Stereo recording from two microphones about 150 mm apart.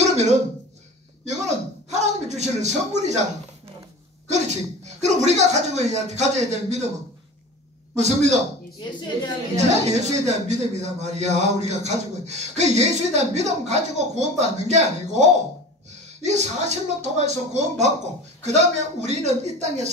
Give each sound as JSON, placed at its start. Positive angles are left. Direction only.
{"t": 0.0, "sound": "a sound", "side_deg": -50}
{"t": 1.2, "sound": "speech", "side_deg": -50}
{"t": 4.3, "sound": "a man's voice", "side_deg": -50}
{"t": 7.9, "sound": "a man's voice", "side_deg": -50}
{"t": 9.6, "sound": "a man's voice", "side_deg": -50}